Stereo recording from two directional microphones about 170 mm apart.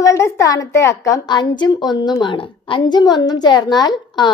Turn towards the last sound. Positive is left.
turn(degrees=25)  # may be behind; listen again after turning